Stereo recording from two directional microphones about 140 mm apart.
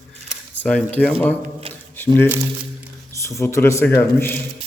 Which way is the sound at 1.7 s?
15° left (ahead or behind).